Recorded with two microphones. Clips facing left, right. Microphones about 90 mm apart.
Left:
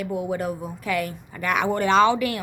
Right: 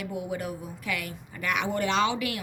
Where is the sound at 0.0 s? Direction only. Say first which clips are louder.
Left 6 dB; 40° left (ahead or behind).